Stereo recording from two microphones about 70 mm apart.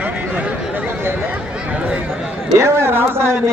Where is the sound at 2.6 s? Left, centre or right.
Right.